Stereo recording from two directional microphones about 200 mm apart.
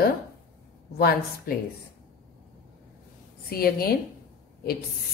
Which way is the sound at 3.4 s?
50° left (ahead or behind).